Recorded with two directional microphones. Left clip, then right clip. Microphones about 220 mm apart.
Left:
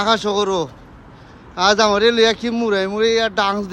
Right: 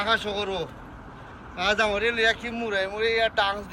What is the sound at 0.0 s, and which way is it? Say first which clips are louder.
Speech: left 8 dB; 15° left (ahead or behind).